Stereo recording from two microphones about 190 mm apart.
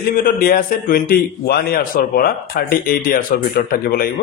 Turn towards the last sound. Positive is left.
turn(degrees=50)  # may be behind; listen again after turning